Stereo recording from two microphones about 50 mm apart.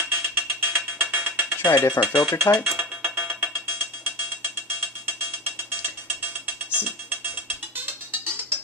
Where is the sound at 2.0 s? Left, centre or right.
Left.